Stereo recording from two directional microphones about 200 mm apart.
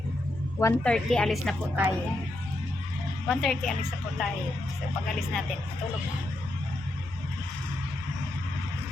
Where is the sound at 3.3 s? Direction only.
Centre (ahead or behind).